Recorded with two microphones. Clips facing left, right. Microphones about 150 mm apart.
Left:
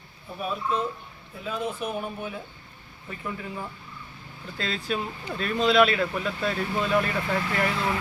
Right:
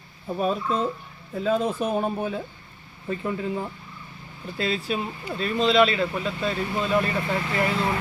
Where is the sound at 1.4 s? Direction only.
40° right (ahead or behind).